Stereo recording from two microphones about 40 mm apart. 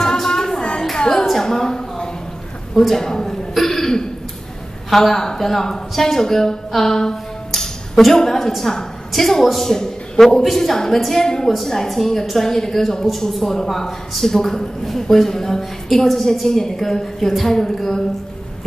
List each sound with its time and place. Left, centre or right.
0.0 s a sound: centre
2.8 s throat clearing: centre
4.8 s a woman's voice: centre
11.4 s a woman's voice: centre